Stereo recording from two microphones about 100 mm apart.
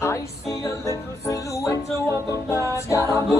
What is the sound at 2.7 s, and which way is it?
A capella, 30° left (ahead or behind).